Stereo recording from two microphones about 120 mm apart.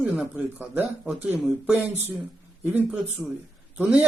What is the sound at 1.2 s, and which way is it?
A man's voice, 15° right (ahead or behind).